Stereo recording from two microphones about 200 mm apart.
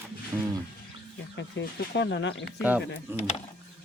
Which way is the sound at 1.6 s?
65° left (ahead or behind).